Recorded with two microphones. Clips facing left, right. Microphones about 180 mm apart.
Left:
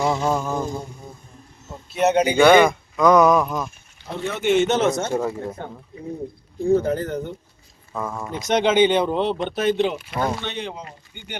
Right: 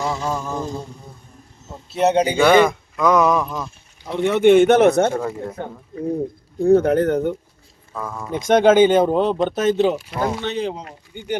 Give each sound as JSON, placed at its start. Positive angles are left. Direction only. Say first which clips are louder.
{"t": 0.0, "sound": "a sound", "louder": "left 3 dB", "side_deg": 20}
{"t": 1.9, "sound": "a man's voice", "louder": "right 1 dB", "side_deg": -30}
{"t": 2.3, "sound": "speech", "louder": "left 3 dB", "side_deg": 0}
{"t": 4.2, "sound": "a man's voice", "louder": "right 7 dB", "side_deg": -65}
{"t": 5.1, "sound": "speech", "louder": "left 1 dB", "side_deg": 5}
{"t": 6.6, "sound": "a man's voice", "louder": "right 5 dB", "side_deg": -65}
{"t": 7.9, "sound": "a sound", "louder": "left 1 dB", "side_deg": 10}
{"t": 8.4, "sound": "a man's voice", "louder": "right 5 dB", "side_deg": -50}